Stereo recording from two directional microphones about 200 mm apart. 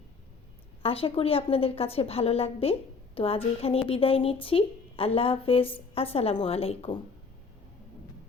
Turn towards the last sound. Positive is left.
turn(degrees=30)  # may be behind; listen again after turning